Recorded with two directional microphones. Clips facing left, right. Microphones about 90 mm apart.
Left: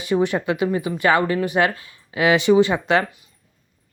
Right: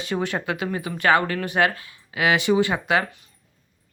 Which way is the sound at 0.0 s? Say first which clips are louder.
Left 6 dB; 20° left (ahead or behind).